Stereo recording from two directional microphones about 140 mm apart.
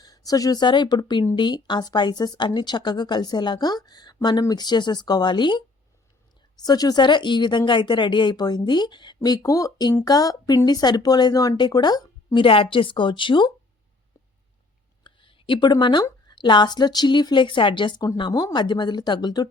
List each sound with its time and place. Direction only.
0.0 s a woman's voice: 25° left (ahead or behind)
15.0 s a woman's voice: 35° left (ahead or behind)